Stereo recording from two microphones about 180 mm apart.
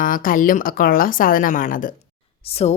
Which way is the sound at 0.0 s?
50° left (ahead or behind).